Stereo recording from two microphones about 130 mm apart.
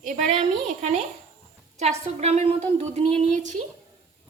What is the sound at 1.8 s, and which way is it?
A woman's voice, 55° right (ahead or behind).